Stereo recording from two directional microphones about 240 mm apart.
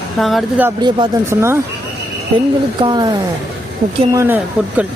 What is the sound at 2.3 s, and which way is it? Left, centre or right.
Speech, right.